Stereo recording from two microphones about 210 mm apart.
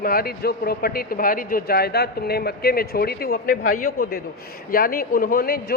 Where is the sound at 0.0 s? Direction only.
45° left (ahead or behind).